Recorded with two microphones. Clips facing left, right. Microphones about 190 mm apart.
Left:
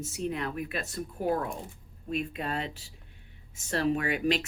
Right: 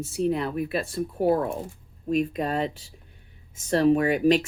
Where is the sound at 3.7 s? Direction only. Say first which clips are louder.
Right 8 dB; 35° right (ahead or behind).